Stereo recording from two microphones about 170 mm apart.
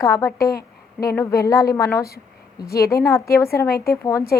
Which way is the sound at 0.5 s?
65° left (ahead or behind).